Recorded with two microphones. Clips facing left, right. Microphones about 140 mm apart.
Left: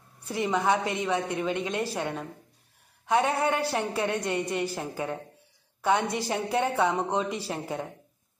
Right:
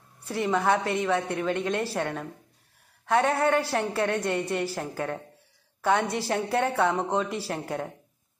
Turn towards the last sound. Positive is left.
turn(degrees=0)  # may be behind; listen again after turning